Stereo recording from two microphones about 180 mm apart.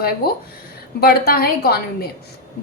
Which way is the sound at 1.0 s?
55° left (ahead or behind).